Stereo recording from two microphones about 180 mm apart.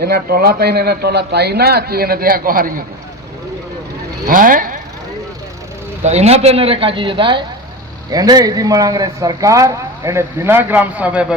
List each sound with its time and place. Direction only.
0.0 s speech: 60° right (ahead or behind)
4.3 s speech: 50° right (ahead or behind)
6.0 s speech: 40° right (ahead or behind); by 11.3 s 5° right (ahead or behind)